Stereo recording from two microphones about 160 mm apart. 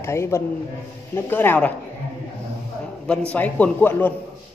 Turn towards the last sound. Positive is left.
turn(degrees=10)  # may be behind; listen again after turning